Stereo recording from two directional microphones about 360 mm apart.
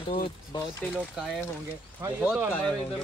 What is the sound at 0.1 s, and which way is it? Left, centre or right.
Speech, centre.